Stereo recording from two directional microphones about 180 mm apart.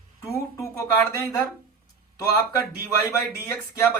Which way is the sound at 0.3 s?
15° left (ahead or behind).